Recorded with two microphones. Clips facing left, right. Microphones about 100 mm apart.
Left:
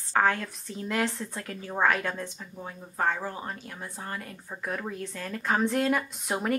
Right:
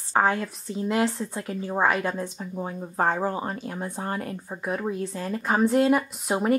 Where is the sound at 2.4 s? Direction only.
35° right (ahead or behind).